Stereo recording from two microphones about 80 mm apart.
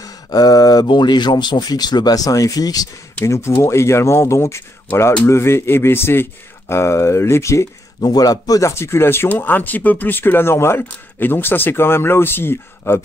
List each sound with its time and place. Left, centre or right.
0.0 s a sound: left
0.8 s speech: left
3.3 s speech: left
8.0 s speech: left